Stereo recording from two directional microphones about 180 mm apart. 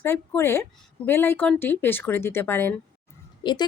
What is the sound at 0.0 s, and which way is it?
A woman's voice, 15° left (ahead or behind).